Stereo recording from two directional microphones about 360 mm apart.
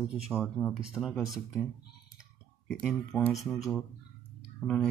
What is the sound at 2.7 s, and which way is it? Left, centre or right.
Speech, centre.